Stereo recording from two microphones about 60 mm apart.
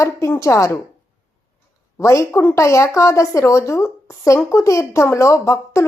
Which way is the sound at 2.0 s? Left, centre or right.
Left.